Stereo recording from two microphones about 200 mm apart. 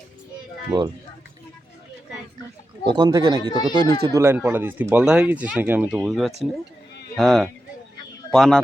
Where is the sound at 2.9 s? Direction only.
20° right (ahead or behind).